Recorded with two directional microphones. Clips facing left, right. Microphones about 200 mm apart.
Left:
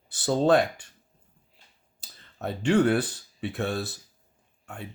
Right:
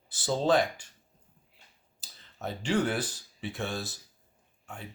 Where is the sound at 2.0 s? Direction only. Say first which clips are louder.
Left 5 dB; 60° left (ahead or behind).